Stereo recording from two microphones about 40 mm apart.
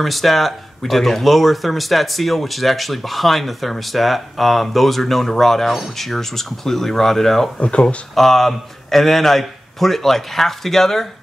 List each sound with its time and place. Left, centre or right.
0.0 s speech: centre
7.5 s speech: left
8.1 s speech: centre